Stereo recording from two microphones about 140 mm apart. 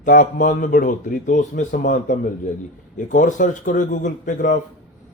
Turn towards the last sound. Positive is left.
turn(degrees=65)  # may be behind; listen again after turning